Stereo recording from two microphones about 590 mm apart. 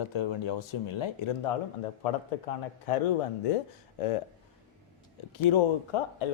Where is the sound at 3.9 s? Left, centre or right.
Left.